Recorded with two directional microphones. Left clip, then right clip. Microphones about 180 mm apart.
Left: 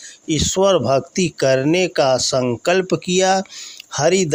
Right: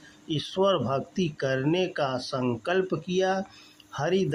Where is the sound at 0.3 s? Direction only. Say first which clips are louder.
Left 9 dB; 40° left (ahead or behind).